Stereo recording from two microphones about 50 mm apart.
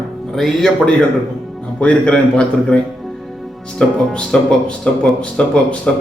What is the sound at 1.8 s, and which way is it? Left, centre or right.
A man's voice, left.